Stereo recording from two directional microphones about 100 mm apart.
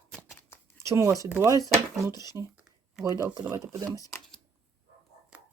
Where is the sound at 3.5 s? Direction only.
35° right (ahead or behind).